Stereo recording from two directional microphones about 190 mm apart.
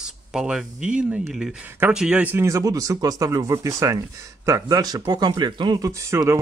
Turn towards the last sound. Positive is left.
turn(degrees=-15)  # may be behind; listen again after turning